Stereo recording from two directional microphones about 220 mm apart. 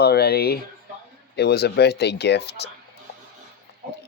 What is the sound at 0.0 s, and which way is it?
Speech, 45° left (ahead or behind).